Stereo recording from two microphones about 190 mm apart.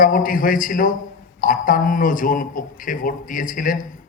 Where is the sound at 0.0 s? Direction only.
45° left (ahead or behind).